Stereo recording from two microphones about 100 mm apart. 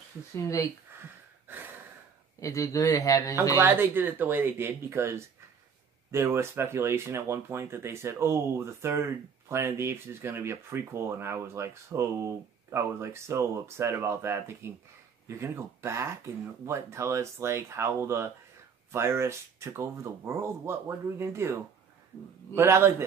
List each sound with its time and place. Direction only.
0.4 s speech: 35° left (ahead or behind)
2.4 s speech: 35° left (ahead or behind)
3.5 s speech: 20° right (ahead or behind)
22.6 s speech: 25° right (ahead or behind)